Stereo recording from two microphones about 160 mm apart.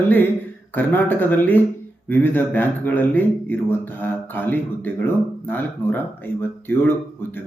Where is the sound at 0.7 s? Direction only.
10° left (ahead or behind).